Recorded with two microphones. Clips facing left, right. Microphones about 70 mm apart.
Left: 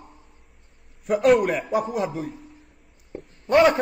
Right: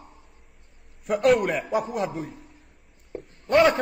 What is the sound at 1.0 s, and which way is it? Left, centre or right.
A man's voice, centre.